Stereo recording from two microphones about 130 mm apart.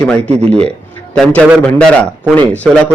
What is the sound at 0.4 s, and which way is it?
Speech, 45° right (ahead or behind).